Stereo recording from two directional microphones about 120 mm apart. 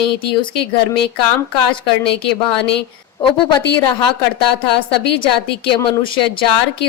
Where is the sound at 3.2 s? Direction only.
45° left (ahead or behind).